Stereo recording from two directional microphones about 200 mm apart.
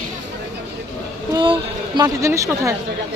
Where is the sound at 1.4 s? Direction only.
25° right (ahead or behind).